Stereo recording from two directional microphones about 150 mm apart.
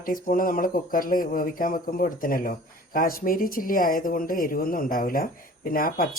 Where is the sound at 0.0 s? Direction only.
65° left (ahead or behind).